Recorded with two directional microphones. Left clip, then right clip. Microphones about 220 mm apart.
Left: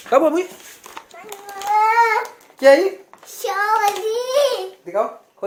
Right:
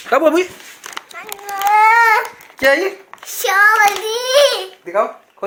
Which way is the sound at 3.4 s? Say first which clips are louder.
Right 7 dB; centre (ahead or behind).